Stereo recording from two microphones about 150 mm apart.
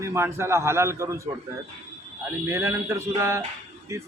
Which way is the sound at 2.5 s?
15° right (ahead or behind).